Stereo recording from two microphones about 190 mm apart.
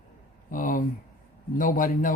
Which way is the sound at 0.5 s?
45° left (ahead or behind).